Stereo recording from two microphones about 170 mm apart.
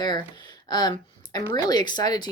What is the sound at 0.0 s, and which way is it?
Speech, 25° left (ahead or behind).